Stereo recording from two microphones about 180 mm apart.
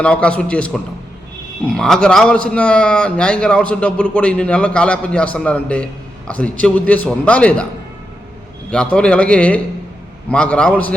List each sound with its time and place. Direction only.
0.0 s a man's voice: 5° left (ahead or behind)
8.7 s a man's voice: 5° left (ahead or behind)